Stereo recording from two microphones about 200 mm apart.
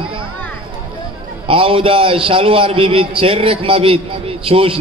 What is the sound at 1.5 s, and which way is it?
A man's voice, 25° right (ahead or behind).